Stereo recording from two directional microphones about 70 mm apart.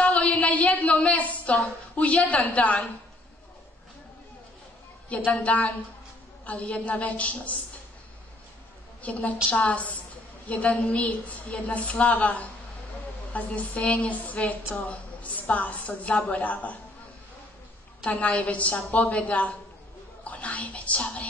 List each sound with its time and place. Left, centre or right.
0.0 s a sound: centre
2.0 s a woman's voice: centre
5.1 s a woman's voice: centre
9.0 s a woman's voice: left
18.0 s a woman's voice: centre